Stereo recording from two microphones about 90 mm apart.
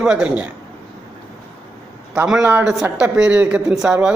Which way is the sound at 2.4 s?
20° right (ahead or behind).